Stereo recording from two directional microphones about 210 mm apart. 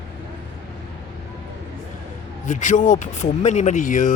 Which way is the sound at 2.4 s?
35° left (ahead or behind).